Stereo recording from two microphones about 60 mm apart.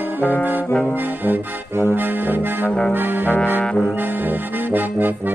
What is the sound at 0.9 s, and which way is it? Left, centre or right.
Music, right.